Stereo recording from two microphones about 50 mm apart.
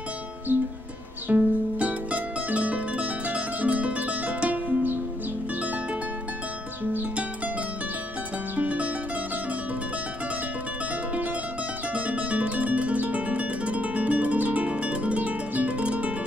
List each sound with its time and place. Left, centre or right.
0.5 s music: right
1.3 s music: right
8.5 s music: right
11.9 s music: right